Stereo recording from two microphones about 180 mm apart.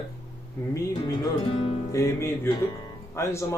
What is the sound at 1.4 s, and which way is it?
Speech, 35° left (ahead or behind).